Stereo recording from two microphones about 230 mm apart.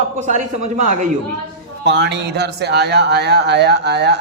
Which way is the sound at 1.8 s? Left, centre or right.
Right.